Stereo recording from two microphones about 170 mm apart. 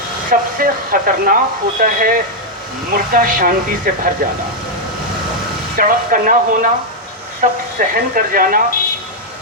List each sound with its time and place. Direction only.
0.3 s speech: 55° right (ahead or behind)
5.7 s speech: 55° right (ahead or behind)
7.8 s speech: 55° right (ahead or behind)